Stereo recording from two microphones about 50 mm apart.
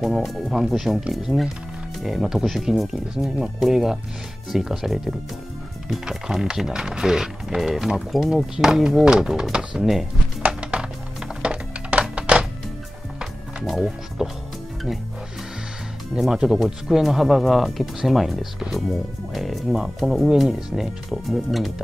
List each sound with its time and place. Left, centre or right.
0.0 s speech: centre
10.6 s music: right
13.7 s speech: centre
16.2 s speech: centre